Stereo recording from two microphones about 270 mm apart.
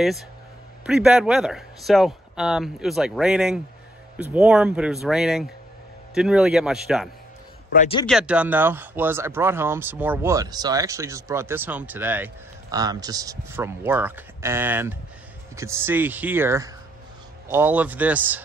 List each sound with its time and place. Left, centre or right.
0.8 s speech: centre
7.7 s a man's voice: left
8.1 s speech: centre